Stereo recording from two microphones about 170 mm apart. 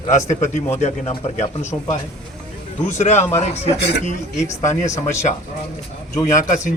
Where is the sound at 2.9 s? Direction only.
45° left (ahead or behind).